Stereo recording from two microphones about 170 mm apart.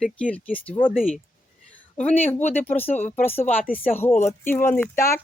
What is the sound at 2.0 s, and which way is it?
Speech, 10° left (ahead or behind).